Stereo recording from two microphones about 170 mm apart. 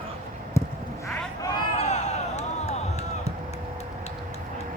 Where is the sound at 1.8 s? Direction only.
40° left (ahead or behind).